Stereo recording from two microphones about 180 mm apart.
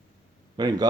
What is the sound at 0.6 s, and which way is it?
Speech, 20° right (ahead or behind).